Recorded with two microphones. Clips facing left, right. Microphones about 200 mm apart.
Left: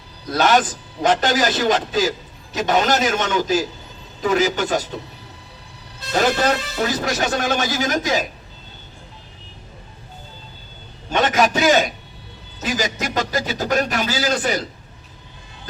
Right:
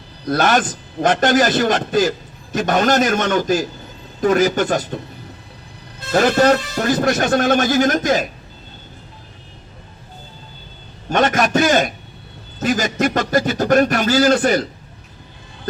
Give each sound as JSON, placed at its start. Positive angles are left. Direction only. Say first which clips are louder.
{"t": 0.3, "sound": "a man's voice", "louder": "right 1 dB", "side_deg": -50}
{"t": 6.1, "sound": "a man's voice", "louder": "right 5 dB", "side_deg": -50}
{"t": 11.1, "sound": "a man's voice", "louder": "right 2 dB", "side_deg": -50}